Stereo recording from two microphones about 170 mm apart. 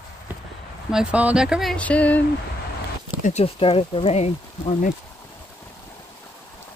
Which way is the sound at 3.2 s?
35° left (ahead or behind).